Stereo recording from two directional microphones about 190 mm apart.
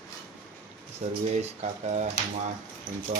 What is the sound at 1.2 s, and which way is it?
Speech, 35° right (ahead or behind).